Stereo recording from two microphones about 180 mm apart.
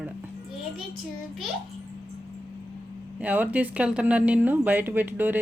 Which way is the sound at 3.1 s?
10° right (ahead or behind).